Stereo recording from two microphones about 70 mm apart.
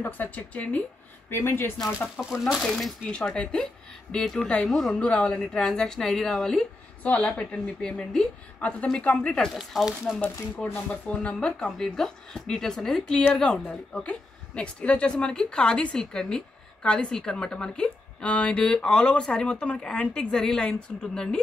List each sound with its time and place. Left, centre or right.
0.0 s speech: left
1.3 s speech: left
2.1 s a woman's voice: centre
7.0 s a woman's voice: left
9.5 s speech: centre
10.7 s a woman's voice: centre